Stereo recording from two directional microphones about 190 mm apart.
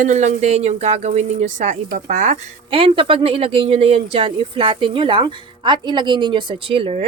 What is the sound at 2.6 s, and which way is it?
Speech, 30° right (ahead or behind).